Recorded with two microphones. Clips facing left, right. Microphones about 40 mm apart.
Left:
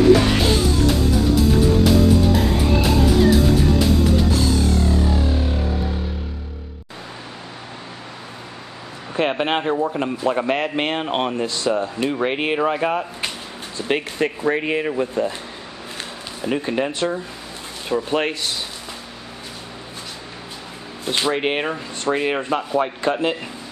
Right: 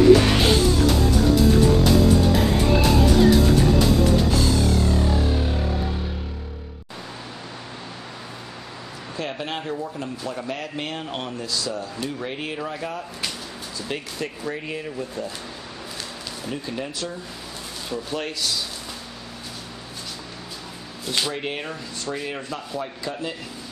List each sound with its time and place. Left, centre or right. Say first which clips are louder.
0.8 s music: left 1 dB; centre
9.1 s speech: left 10 dB; left
16.4 s speech: left 9 dB; left
21.0 s speech: left 5 dB; left
21.4 s speech: left 8 dB; left